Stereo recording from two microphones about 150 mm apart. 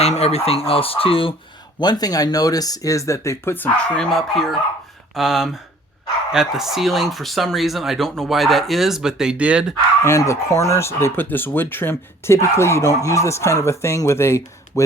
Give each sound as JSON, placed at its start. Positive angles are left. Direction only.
{"t": 0.0, "sound": "speech", "side_deg": 45}
{"t": 1.8, "sound": "speech", "side_deg": 25}
{"t": 10.0, "sound": "speech", "side_deg": 20}